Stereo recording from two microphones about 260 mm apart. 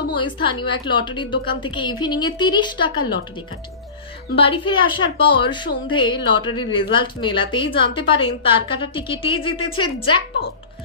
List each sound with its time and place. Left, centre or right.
0.1 s a woman's voice: centre
4.4 s a woman's voice: centre